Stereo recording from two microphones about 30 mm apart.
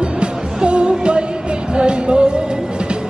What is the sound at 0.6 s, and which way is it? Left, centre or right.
Music, right.